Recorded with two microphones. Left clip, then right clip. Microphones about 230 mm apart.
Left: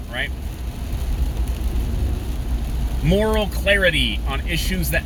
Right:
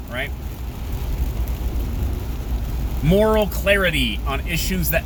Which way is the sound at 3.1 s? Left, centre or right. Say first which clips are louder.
Right 3 dB; centre.